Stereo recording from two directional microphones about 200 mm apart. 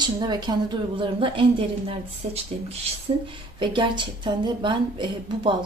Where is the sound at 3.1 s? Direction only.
25° right (ahead or behind).